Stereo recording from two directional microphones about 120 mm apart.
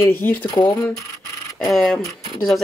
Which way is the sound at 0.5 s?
30° left (ahead or behind).